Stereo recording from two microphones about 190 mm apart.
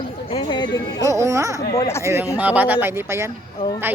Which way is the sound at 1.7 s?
15° left (ahead or behind).